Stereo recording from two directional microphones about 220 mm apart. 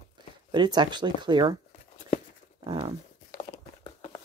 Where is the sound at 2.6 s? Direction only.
20° right (ahead or behind).